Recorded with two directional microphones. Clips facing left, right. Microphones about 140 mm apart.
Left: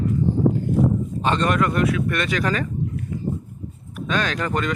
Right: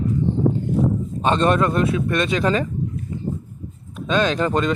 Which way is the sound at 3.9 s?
20° right (ahead or behind).